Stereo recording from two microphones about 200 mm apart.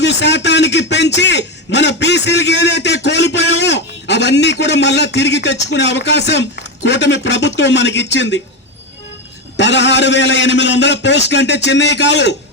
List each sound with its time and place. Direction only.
0.0 s a man's voice: 60° left (ahead or behind)
9.6 s a man's voice: 60° left (ahead or behind)